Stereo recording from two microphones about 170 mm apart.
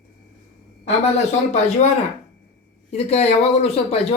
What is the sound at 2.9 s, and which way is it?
Speech, 40° left (ahead or behind).